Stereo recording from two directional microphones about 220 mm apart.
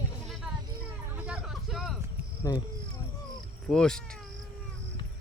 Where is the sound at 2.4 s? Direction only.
15° left (ahead or behind).